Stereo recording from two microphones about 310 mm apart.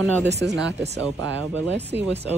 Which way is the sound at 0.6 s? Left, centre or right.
Right.